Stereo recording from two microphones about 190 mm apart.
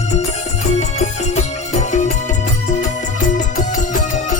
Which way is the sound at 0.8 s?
35° left (ahead or behind).